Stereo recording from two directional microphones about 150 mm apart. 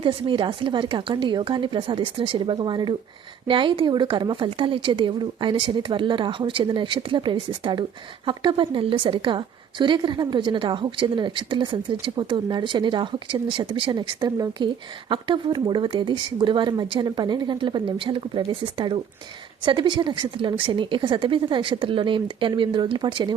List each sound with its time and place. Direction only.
0.0 s a woman's voice: 35° right (ahead or behind)